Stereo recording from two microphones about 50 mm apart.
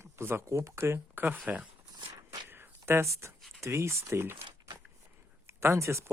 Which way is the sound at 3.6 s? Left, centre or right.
Right.